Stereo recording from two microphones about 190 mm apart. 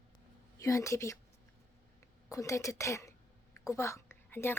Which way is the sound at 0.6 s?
15° left (ahead or behind).